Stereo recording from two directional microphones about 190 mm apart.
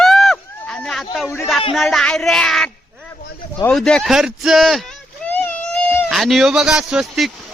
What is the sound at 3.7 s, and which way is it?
Speech, 5° left (ahead or behind).